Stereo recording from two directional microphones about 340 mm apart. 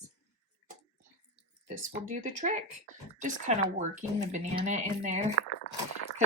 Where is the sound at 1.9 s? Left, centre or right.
Right.